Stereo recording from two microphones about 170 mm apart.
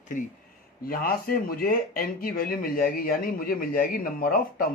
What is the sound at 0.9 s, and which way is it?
Speech, 60° left (ahead or behind).